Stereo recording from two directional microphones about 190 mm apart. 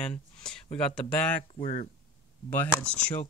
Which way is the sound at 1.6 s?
40° left (ahead or behind).